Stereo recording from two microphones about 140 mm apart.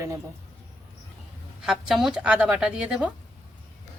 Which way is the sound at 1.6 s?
5° right (ahead or behind).